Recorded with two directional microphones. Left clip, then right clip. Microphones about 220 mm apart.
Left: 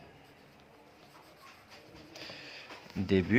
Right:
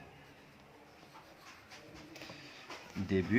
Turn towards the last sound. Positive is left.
turn(degrees=50)  # may be behind; listen again after turning